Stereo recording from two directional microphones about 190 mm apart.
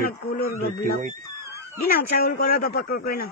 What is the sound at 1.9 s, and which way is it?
Speech, 55° left (ahead or behind).